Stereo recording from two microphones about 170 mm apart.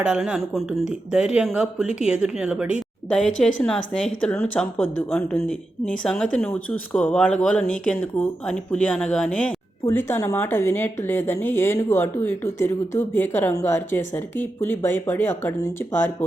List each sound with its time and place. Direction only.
0.0 s speech: 5° right (ahead or behind)
3.1 s a woman's voice: 5° left (ahead or behind)
9.8 s a woman's voice: 15° left (ahead or behind)